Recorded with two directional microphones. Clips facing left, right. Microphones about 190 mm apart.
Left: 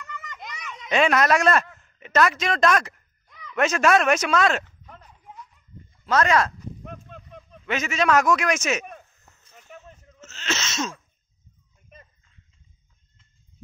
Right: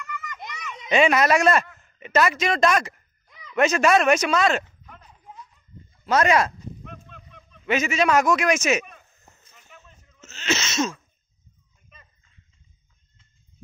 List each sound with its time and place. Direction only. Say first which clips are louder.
0.8 s a man's voice: right 1 dB; centre (ahead or behind)
3.3 s a sound: left 3 dB; 10° right (ahead or behind)
3.5 s a man's voice: right 1 dB; centre (ahead or behind)
6.0 s speech: right 1 dB; 10° right (ahead or behind)
7.6 s a man's voice: right 2 dB; 5° right (ahead or behind)
9.7 s a sound: left 7 dB; 45° left (ahead or behind)
10.2 s sneeze: right 4 dB; 10° right (ahead or behind)